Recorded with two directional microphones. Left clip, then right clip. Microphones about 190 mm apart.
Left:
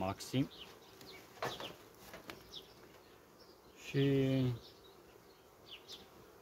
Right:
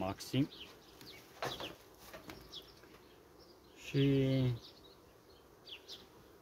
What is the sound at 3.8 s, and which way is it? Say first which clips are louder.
Speech: even; 25° right (ahead or behind).